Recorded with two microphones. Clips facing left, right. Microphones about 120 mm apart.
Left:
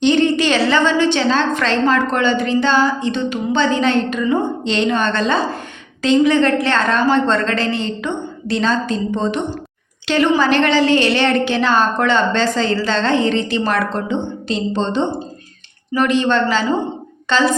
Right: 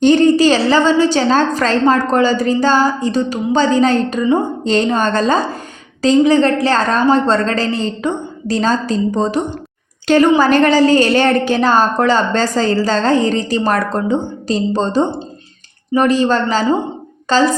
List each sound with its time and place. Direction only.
0.0 s a woman's voice: 45° right (ahead or behind)